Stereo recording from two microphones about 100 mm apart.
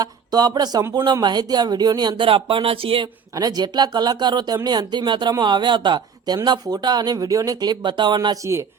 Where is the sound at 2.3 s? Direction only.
65° right (ahead or behind).